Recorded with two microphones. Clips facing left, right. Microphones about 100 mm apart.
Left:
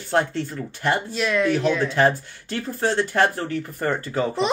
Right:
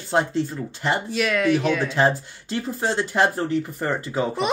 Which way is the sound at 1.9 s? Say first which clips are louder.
Left 1 dB; 20° right (ahead or behind).